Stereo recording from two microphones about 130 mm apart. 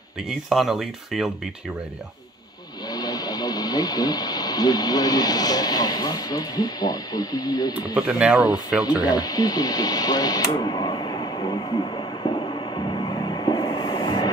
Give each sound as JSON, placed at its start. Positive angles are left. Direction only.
{"t": 0.5, "sound": "speech", "side_deg": 0}
{"t": 2.9, "sound": "speech", "side_deg": 30}
{"t": 7.9, "sound": "speech", "side_deg": -10}
{"t": 8.9, "sound": "radio", "side_deg": 30}